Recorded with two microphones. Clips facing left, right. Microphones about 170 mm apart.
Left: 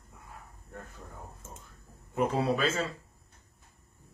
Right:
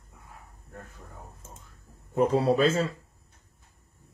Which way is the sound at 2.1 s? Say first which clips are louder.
Right 5 dB; 35° right (ahead or behind).